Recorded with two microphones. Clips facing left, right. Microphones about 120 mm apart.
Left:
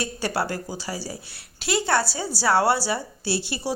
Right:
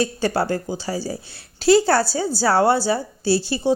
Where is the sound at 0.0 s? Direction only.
30° right (ahead or behind).